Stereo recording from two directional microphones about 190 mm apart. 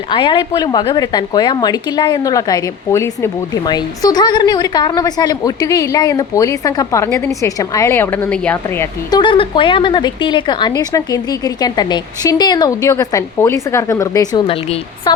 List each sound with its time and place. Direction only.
0.1 s a woman's voice: 25° left (ahead or behind); by 8.9 s 10° left (ahead or behind)
9.0 s a woman's voice: 25° left (ahead or behind)